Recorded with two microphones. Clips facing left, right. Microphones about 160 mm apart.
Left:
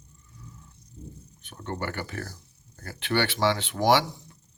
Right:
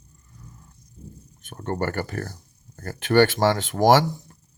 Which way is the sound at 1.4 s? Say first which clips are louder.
Right 6 dB; 45° right (ahead or behind).